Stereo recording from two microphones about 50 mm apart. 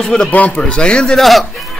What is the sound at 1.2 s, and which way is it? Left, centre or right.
Speech, centre.